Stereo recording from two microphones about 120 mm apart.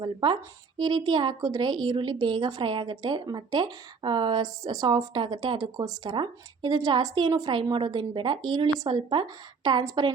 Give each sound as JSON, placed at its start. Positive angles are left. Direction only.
{"t": 0.0, "sound": "a woman's voice", "side_deg": -40}